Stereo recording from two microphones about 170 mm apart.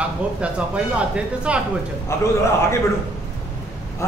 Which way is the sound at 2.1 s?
15° left (ahead or behind).